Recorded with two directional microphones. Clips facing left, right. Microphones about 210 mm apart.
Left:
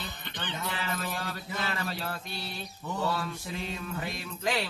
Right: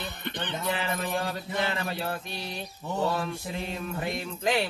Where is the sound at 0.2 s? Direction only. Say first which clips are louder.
Right 8 dB; 60° right (ahead or behind).